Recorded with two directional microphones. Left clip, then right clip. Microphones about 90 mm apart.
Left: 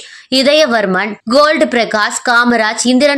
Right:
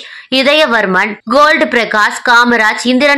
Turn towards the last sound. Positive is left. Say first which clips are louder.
# right 1 dB
turn(degrees=35)  # may be behind; listen again after turning